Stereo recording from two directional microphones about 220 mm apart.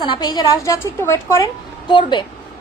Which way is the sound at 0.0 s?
20° left (ahead or behind).